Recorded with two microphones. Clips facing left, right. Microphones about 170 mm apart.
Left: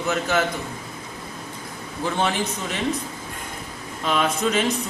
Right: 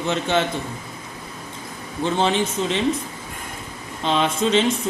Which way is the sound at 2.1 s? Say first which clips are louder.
Right 4 dB; 25° right (ahead or behind).